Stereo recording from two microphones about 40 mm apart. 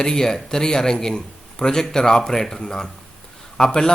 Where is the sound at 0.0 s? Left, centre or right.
Centre.